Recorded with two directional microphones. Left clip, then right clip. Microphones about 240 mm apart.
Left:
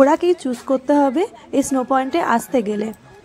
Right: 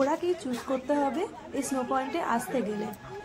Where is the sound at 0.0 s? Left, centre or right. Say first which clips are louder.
Left 13 dB; left.